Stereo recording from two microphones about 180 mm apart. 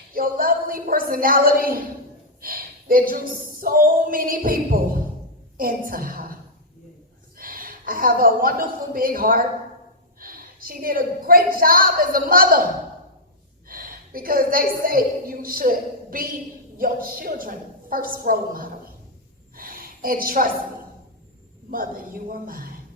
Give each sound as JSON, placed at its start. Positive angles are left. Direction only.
{"t": 0.1, "sound": "a woman's voice", "side_deg": -55}
{"t": 2.4, "sound": "a sound", "side_deg": -50}
{"t": 3.1, "sound": "a woman's voice", "side_deg": -55}
{"t": 7.3, "sound": "a woman's voice", "side_deg": -50}
{"t": 13.7, "sound": "a woman's voice", "side_deg": -50}
{"t": 19.5, "sound": "a sound", "side_deg": -55}
{"t": 21.7, "sound": "a woman's voice", "side_deg": -50}